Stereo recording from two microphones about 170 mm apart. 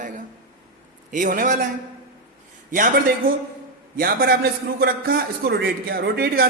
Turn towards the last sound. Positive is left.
turn(degrees=-65)  # may be behind; listen again after turning